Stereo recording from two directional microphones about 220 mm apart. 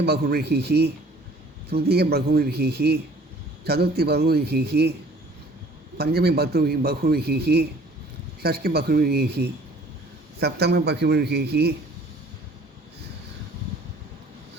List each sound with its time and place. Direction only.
0.0 s a man's voice: 45° right (ahead or behind)
6.0 s a man's voice: 45° right (ahead or behind)